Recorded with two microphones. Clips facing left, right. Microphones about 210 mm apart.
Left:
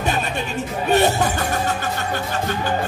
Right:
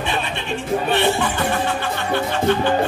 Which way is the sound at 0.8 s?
40° left (ahead or behind).